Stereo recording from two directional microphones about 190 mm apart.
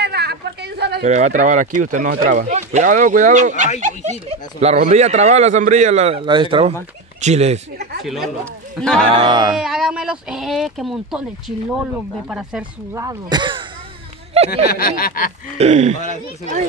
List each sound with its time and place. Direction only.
0.0 s a sound: 60° right (ahead or behind)
1.0 s speech: 40° right (ahead or behind)
8.0 s speech: centre (ahead or behind)
9.1 s speech: 25° right (ahead or behind)
9.6 s speech: 5° right (ahead or behind)
12.9 s speech: 20° right (ahead or behind)
14.7 s a sound: 50° left (ahead or behind)
15.5 s speech: 35° right (ahead or behind)